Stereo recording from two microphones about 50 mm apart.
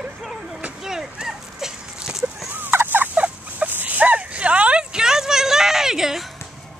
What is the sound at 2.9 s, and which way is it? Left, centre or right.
Turkey, right.